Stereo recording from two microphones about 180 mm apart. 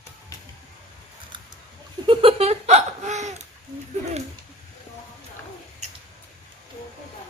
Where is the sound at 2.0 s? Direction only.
30° right (ahead or behind).